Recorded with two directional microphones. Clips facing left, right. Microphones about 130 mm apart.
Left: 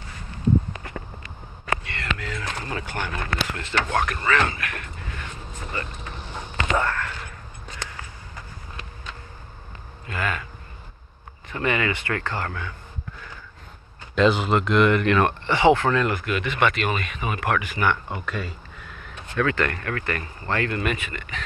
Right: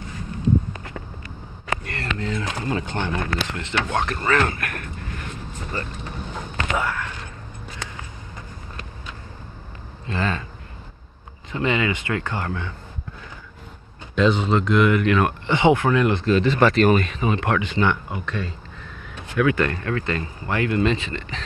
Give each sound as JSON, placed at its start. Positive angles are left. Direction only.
{"t": 1.9, "sound": "a sound", "side_deg": -40}
{"t": 2.2, "sound": "speech", "side_deg": -25}
{"t": 4.1, "sound": "speech", "side_deg": -30}
{"t": 4.5, "sound": "speech", "side_deg": -50}
{"t": 6.5, "sound": "a sound", "side_deg": -5}
{"t": 10.0, "sound": "speech", "side_deg": -30}
{"t": 11.5, "sound": "speech", "side_deg": -20}
{"t": 14.1, "sound": "speech", "side_deg": 5}
{"t": 15.4, "sound": "speech", "side_deg": -20}
{"t": 18.1, "sound": "a sound", "side_deg": 5}
{"t": 19.3, "sound": "speech", "side_deg": -15}